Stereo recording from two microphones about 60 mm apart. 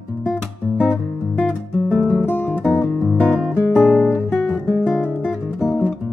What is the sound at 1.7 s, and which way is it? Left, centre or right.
Guitar, centre.